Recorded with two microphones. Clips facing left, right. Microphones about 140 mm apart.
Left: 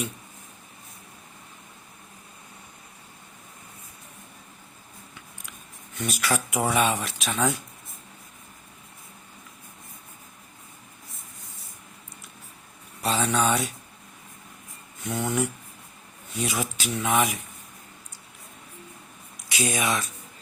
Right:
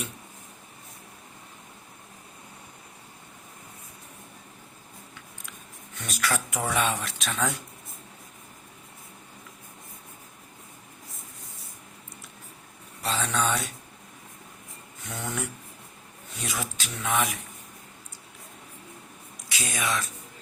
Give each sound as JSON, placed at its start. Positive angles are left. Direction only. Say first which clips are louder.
{"t": 6.1, "sound": "speech", "louder": "left 2 dB", "side_deg": 10}
{"t": 13.0, "sound": "speech", "louder": "left 4 dB", "side_deg": 10}
{"t": 15.0, "sound": "speech", "louder": "left 7 dB", "side_deg": 10}
{"t": 19.5, "sound": "speech", "louder": "left 4 dB", "side_deg": 15}